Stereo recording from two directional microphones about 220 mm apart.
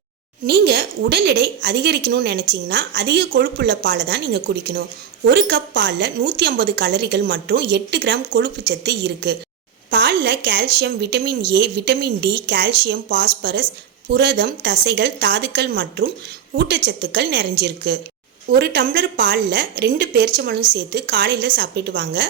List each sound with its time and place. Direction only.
0.4 s a woman's voice: 50° right (ahead or behind)